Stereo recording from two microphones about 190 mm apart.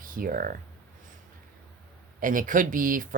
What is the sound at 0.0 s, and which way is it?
Speech, 45° right (ahead or behind).